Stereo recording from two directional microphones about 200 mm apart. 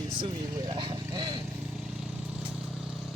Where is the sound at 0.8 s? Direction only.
20° right (ahead or behind).